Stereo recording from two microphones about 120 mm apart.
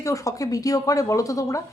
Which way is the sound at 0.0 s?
25° left (ahead or behind).